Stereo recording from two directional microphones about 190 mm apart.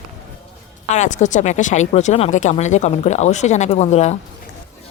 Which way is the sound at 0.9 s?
40° left (ahead or behind).